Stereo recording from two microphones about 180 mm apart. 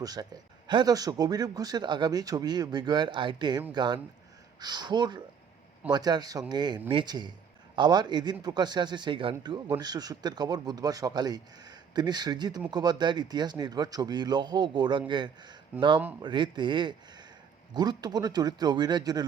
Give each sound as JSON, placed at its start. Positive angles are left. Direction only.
{"t": 0.0, "sound": "speech", "side_deg": -20}